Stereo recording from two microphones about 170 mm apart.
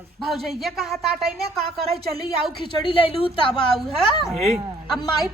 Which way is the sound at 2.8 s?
30° left (ahead or behind).